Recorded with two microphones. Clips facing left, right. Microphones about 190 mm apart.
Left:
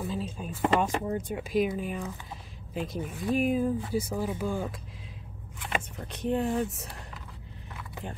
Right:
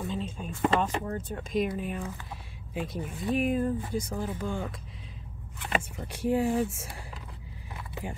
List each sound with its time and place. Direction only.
0.0 s speech: 5° left (ahead or behind)
5.9 s speech: 10° right (ahead or behind)